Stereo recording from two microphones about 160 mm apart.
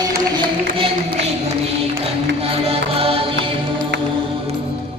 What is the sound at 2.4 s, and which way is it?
Music, 35° right (ahead or behind).